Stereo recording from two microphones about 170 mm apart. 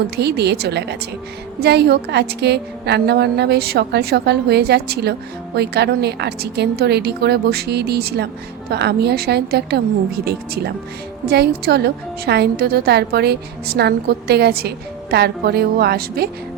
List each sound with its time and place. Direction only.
0.2 s a woman's voice: 75° right (ahead or behind)